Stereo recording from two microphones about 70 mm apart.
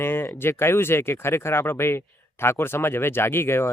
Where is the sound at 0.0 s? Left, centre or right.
Left.